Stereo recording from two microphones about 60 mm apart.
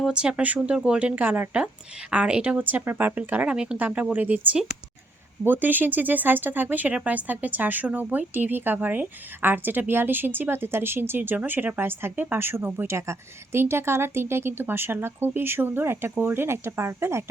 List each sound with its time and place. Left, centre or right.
0.1 s speech: centre; by 1.5 s right
1.5 s speech: centre
3.5 s speech: centre
5.4 s speech: right
13.0 s speech: right